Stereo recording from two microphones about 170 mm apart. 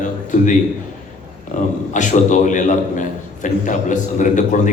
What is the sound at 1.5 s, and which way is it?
A man's voice, 45° left (ahead or behind).